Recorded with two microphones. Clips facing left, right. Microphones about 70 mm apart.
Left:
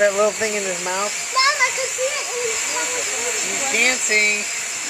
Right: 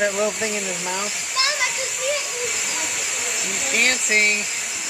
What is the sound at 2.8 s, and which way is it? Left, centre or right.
Speech, centre.